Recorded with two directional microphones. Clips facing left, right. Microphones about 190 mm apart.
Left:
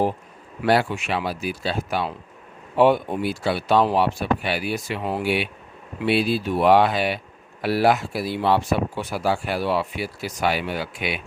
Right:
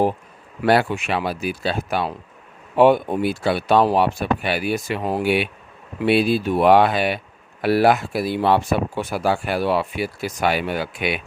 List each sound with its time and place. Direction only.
0.6 s speech: 55° right (ahead or behind)